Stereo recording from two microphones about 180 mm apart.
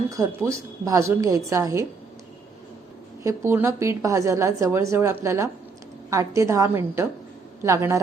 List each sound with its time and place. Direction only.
0.1 s a woman's voice: 15° right (ahead or behind)
3.2 s a woman's voice: 15° right (ahead or behind)